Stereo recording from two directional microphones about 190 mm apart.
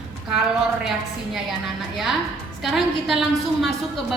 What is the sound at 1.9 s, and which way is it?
A woman's voice, centre (ahead or behind).